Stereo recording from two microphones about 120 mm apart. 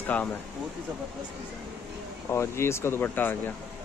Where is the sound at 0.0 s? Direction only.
15° left (ahead or behind).